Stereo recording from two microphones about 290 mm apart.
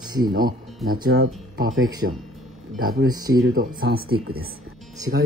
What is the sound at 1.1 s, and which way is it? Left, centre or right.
Speech, right.